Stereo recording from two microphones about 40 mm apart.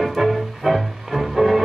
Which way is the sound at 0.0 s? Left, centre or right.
Centre.